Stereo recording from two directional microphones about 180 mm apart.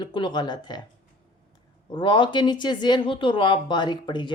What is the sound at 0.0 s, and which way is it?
Mantra, 25° left (ahead or behind).